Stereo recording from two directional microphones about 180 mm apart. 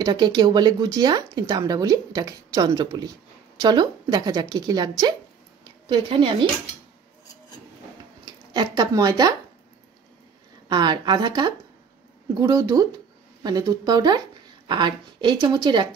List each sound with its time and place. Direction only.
0.0 s speech: 20° right (ahead or behind)
8.3 s speech: 25° right (ahead or behind)
10.7 s speech: 25° right (ahead or behind)